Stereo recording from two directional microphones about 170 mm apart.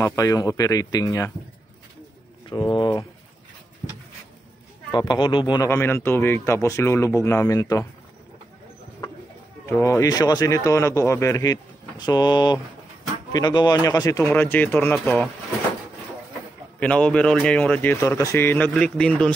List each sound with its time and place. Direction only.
0.0 s speech: 20° left (ahead or behind)
2.4 s speech: 25° left (ahead or behind)
4.9 s speech: 25° left (ahead or behind)
9.7 s speech: 15° left (ahead or behind)
16.8 s speech: 5° left (ahead or behind)